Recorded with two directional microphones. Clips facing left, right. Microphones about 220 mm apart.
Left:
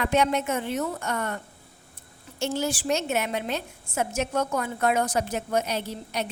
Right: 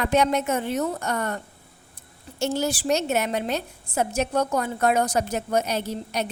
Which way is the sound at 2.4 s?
40° right (ahead or behind).